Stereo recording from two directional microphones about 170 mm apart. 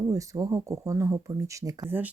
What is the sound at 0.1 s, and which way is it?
Speech, 20° right (ahead or behind).